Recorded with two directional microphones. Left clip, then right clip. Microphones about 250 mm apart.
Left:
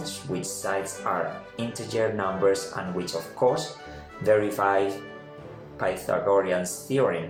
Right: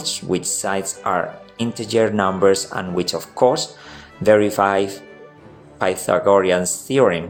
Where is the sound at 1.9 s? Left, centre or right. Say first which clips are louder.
Right 9 dB; right.